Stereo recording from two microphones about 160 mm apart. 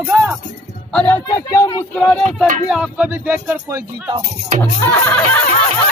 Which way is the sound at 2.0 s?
5° left (ahead or behind).